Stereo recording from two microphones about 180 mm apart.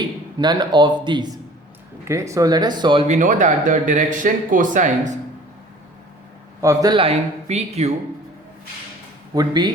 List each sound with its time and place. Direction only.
0.3 s speech: 25° right (ahead or behind)
3.1 s speech: 45° right (ahead or behind)
6.6 s speech: 20° right (ahead or behind); by 7.9 s 40° right (ahead or behind)
9.3 s speech: 20° right (ahead or behind)